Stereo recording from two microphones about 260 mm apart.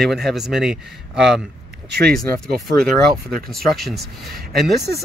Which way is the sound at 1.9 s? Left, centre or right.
Right.